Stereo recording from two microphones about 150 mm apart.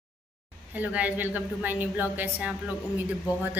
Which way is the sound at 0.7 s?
10° right (ahead or behind).